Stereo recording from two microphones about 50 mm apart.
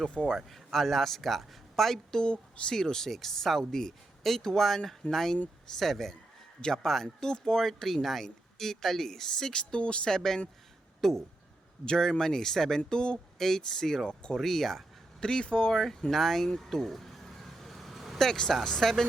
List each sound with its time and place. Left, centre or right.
0.0 s speech: left
0.3 s speech: centre
2.2 s speech: centre
10.1 s speech: centre
11.9 s speech: centre
14.3 s speech: centre
15.2 s speech: centre
18.2 s speech: centre